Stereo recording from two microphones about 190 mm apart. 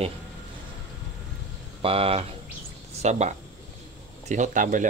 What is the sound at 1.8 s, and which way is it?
Speech, 30° right (ahead or behind).